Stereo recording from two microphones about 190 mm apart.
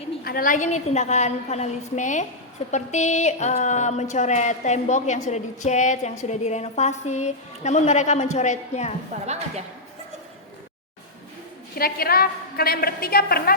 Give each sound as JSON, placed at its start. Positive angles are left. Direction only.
{"t": 0.3, "sound": "speech", "side_deg": 45}
{"t": 9.2, "sound": "speech", "side_deg": -35}
{"t": 11.7, "sound": "a woman's voice", "side_deg": 55}